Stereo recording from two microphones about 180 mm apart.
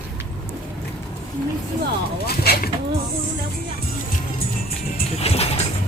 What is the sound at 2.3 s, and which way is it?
Speech, 60° left (ahead or behind).